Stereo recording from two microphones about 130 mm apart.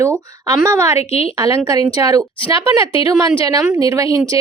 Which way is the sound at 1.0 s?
50° left (ahead or behind).